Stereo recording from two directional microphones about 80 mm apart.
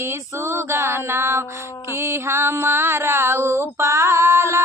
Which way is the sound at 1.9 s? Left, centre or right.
Right.